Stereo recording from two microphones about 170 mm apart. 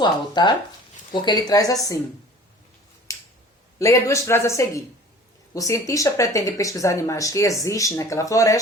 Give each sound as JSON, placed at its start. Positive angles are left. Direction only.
{"t": 0.0, "sound": "speech", "side_deg": 25}
{"t": 3.1, "sound": "a sound", "side_deg": 20}
{"t": 3.8, "sound": "speech", "side_deg": 15}